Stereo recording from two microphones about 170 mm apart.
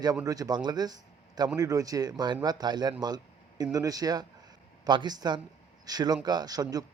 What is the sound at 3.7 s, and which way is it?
Speech, 20° right (ahead or behind).